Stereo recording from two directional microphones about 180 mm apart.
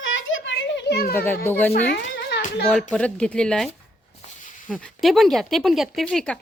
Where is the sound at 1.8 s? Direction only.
70° left (ahead or behind).